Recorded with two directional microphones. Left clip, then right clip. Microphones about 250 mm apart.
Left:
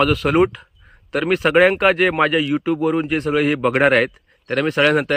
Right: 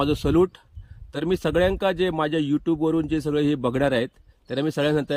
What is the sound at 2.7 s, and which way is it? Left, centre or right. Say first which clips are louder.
Speech: left 4 dB; left.